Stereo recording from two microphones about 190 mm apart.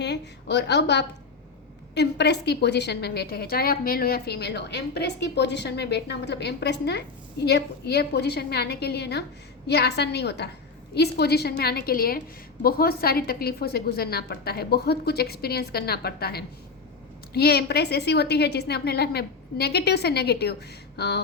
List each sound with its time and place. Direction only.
0.0 s a woman's voice: 60° left (ahead or behind)